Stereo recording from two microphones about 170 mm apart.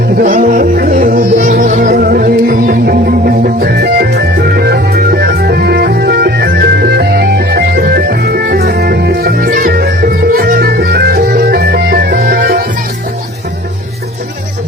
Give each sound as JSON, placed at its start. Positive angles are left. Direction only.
{"t": 0.2, "sound": "music", "side_deg": -55}